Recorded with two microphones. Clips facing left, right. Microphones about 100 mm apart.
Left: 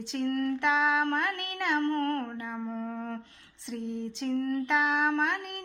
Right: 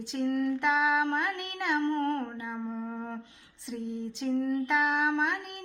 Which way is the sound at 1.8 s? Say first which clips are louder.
Right 1 dB; 15° right (ahead or behind).